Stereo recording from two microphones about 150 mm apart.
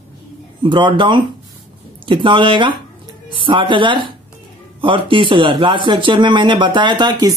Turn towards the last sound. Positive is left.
turn(degrees=-30)  # may be behind; listen again after turning